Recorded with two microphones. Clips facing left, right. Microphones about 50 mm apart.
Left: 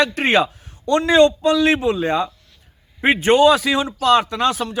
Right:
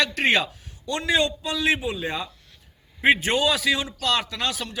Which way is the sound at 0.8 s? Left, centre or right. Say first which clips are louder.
Left 10 dB; left.